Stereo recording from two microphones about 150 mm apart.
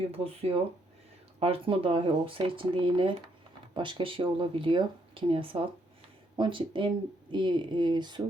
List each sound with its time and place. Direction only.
0.1 s speech: 40° right (ahead or behind)